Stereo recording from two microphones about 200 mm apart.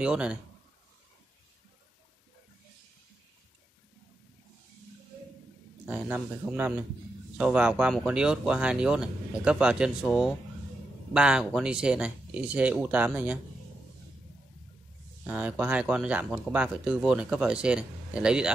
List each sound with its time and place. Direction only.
0.0 s speech: 5° right (ahead or behind)
5.9 s speech: 10° right (ahead or behind)
15.2 s speech: 5° right (ahead or behind)